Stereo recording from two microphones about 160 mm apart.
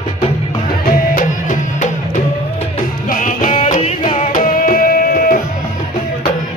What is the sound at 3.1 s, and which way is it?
Music, 55° left (ahead or behind).